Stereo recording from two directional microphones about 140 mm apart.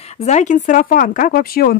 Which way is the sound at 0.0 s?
50° left (ahead or behind).